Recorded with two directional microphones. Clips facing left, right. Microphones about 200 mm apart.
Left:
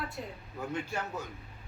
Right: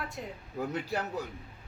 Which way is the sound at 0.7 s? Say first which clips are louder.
Even; 35° right (ahead or behind).